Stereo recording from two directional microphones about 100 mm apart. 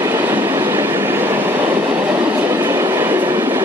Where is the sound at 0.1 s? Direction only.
20° right (ahead or behind).